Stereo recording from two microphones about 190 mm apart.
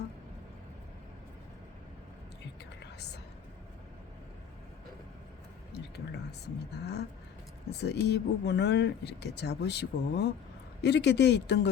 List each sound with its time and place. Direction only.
2.8 s a sound: 60° left (ahead or behind)
5.7 s whispering: 60° left (ahead or behind)
7.7 s speech: 60° left (ahead or behind)